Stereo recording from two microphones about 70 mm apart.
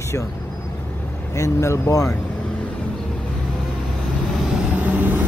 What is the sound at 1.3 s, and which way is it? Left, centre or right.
Speech, left.